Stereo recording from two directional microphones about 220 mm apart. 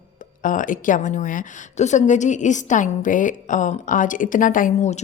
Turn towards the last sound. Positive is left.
turn(degrees=30)  # may be behind; listen again after turning